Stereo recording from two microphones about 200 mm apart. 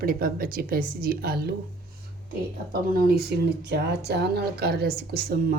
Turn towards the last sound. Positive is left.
turn(degrees=-50)  # may be behind; listen again after turning